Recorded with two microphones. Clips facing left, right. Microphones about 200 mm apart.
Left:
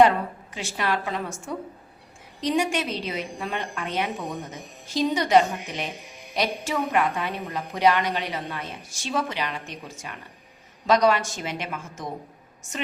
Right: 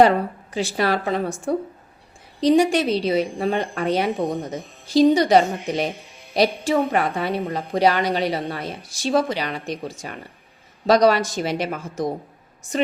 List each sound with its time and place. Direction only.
0.5 s a woman's voice: 35° right (ahead or behind)